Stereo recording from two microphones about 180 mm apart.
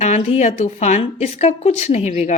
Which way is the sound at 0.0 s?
40° left (ahead or behind).